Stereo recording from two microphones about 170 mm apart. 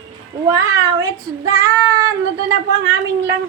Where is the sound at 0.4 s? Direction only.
15° right (ahead or behind).